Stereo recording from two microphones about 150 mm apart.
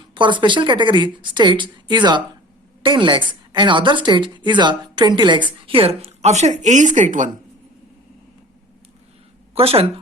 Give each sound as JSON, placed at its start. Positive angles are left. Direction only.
{"t": 0.1, "sound": "a woman's voice", "side_deg": -30}
{"t": 9.6, "sound": "a woman's voice", "side_deg": -40}